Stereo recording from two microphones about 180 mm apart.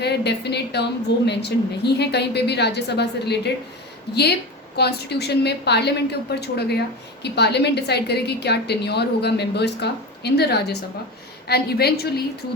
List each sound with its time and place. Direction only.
0.0 s a woman's voice: 70° left (ahead or behind)